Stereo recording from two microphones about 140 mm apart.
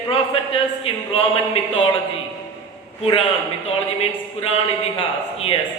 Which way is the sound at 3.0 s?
45° left (ahead or behind).